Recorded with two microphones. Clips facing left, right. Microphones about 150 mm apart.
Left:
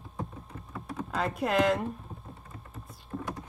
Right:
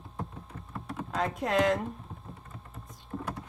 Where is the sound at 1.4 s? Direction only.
5° left (ahead or behind).